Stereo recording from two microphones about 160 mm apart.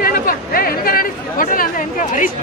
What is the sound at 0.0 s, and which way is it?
Chatter, 65° left (ahead or behind).